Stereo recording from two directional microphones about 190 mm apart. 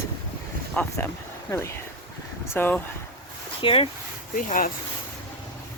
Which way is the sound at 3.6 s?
30° left (ahead or behind).